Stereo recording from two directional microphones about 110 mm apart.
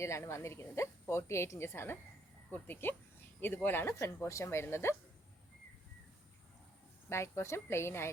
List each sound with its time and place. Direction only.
0.0 s a woman's voice: 25° left (ahead or behind)
7.1 s a woman's voice: 25° left (ahead or behind)